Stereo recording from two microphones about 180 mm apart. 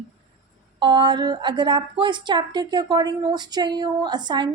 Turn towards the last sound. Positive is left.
turn(degrees=-25)  # may be behind; listen again after turning